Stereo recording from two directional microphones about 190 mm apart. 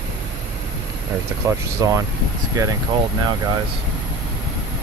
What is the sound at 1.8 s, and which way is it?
Speech, 15° right (ahead or behind).